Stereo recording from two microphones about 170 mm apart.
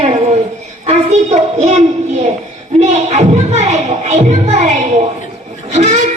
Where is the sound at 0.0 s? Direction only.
40° right (ahead or behind).